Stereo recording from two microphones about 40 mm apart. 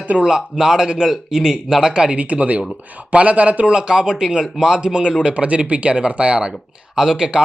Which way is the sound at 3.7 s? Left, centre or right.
Right.